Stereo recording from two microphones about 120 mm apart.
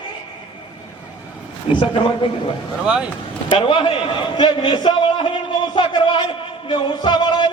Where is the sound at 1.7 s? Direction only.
45° left (ahead or behind).